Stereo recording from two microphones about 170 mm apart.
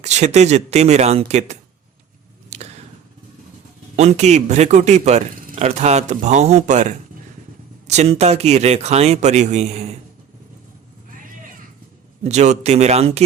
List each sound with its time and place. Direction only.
0.0 s speech: 40° right (ahead or behind)
2.5 s a sound: 40° right (ahead or behind)
3.9 s speech: 40° right (ahead or behind)
12.2 s speech: 40° right (ahead or behind)